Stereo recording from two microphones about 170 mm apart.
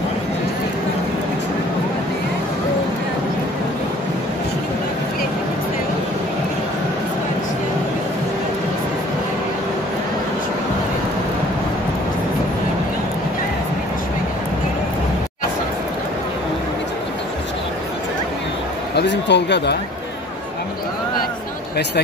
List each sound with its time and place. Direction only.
18.9 s speech: 90° left